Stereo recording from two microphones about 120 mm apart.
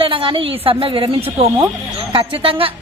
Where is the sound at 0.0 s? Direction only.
45° right (ahead or behind).